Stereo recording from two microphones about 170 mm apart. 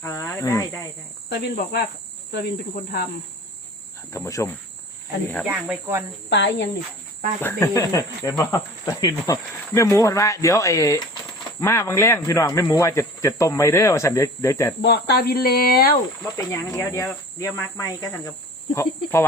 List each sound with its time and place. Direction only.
0.0 s speech: 20° left (ahead or behind)
1.3 s speech: 70° left (ahead or behind)
4.1 s speech: 20° left (ahead or behind)
5.5 s speech: 10° right (ahead or behind)
6.3 s speech: 90° left
7.6 s speech: 20° left (ahead or behind)
14.8 s speech: 75° left (ahead or behind)
16.5 s speech: 15° left (ahead or behind)